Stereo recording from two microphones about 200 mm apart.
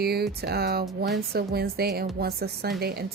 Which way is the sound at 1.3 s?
50° right (ahead or behind).